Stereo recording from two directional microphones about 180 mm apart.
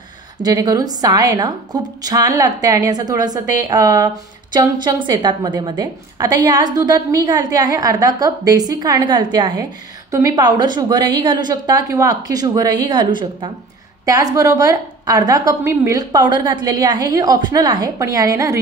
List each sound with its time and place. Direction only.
0.4 s a woman's voice: 20° right (ahead or behind)